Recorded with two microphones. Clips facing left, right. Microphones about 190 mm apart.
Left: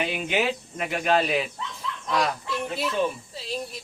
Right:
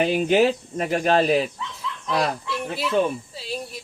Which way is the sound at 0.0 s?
40° right (ahead or behind).